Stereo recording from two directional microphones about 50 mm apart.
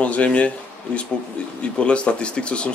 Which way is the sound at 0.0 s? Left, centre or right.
Left.